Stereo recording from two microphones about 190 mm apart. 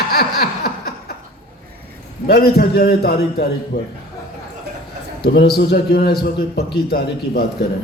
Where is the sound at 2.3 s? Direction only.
55° left (ahead or behind).